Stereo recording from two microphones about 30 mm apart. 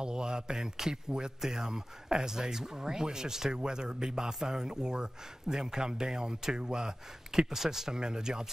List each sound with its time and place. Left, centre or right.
0.0 s speech: right
7.3 s speech: centre